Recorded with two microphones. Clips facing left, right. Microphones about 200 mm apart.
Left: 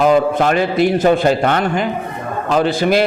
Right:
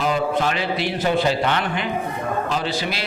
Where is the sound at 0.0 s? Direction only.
50° left (ahead or behind).